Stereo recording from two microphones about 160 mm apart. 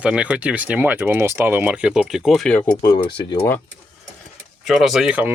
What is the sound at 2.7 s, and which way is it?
Speech, 20° left (ahead or behind).